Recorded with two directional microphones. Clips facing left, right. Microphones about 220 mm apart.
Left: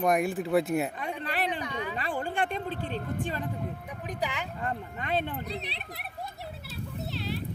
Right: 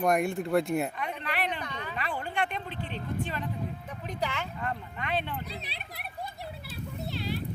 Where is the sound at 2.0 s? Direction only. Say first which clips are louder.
Left 1 dB; 45° left (ahead or behind).